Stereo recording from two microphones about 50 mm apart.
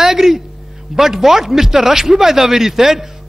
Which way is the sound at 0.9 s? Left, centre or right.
Centre.